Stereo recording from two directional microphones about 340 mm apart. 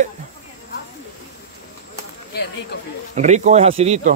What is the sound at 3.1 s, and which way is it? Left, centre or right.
Speech, right.